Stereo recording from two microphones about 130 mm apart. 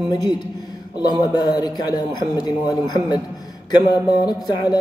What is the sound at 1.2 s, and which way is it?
A man's voice, 30° left (ahead or behind).